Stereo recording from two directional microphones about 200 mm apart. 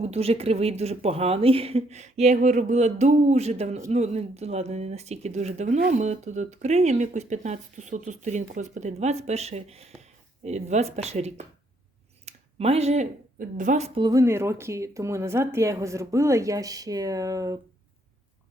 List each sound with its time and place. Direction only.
0.0 s a woman's voice: 30° right (ahead or behind)